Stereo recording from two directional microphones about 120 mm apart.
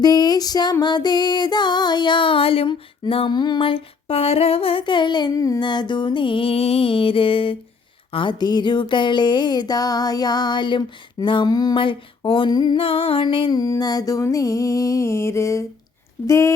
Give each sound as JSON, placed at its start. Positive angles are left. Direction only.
{"t": 0.0, "sound": "music", "side_deg": 35}
{"t": 12.8, "sound": "music", "side_deg": 50}